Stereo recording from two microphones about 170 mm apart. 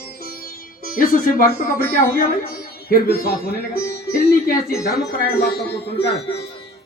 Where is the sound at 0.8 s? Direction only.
55° left (ahead or behind).